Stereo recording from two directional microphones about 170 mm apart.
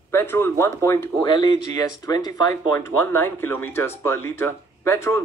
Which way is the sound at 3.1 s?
10° left (ahead or behind).